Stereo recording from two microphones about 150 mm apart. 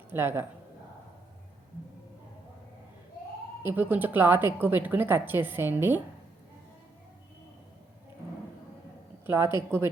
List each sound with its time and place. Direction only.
0.1 s a woman's voice: 15° right (ahead or behind)
3.6 s a woman's voice: 10° right (ahead or behind)
9.2 s a woman's voice: 15° right (ahead or behind)